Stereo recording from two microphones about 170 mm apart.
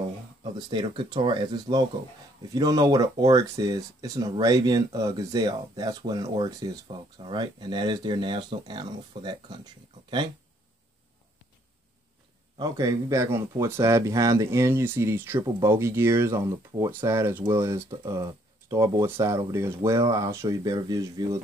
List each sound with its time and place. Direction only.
0.4 s speech: 25° right (ahead or behind)
12.5 s speech: 20° right (ahead or behind)